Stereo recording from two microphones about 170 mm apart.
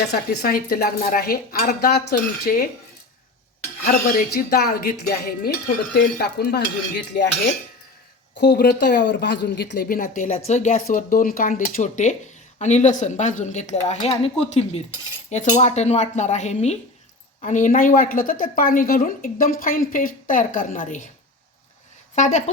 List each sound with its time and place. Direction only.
0.1 s a woman's voice: 60° left (ahead or behind)
4.4 s a woman's voice: 65° left (ahead or behind)
5.9 s cutlery: 65° left (ahead or behind)
8.4 s a woman's voice: 80° left; by 21.1 s 50° left (ahead or behind)
22.1 s a woman's voice: 45° left (ahead or behind)